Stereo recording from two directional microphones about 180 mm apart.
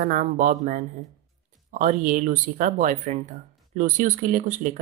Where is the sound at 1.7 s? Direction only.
45° right (ahead or behind).